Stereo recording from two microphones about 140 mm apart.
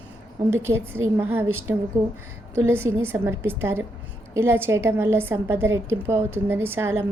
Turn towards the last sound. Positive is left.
turn(degrees=-20)  # may be behind; listen again after turning